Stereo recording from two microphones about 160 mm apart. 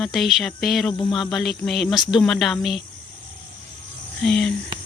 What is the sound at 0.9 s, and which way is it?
Speech, 30° left (ahead or behind).